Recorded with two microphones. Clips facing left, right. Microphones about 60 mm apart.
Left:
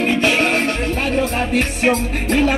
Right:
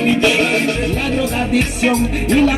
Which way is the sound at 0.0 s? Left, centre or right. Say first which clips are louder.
Right 2 dB; left.